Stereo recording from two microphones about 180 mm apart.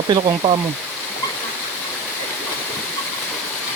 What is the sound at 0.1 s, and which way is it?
Sizzle, 30° right (ahead or behind).